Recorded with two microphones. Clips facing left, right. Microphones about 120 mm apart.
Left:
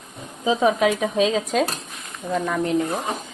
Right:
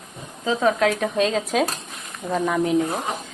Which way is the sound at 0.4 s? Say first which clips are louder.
Left 1 dB; 15° left (ahead or behind).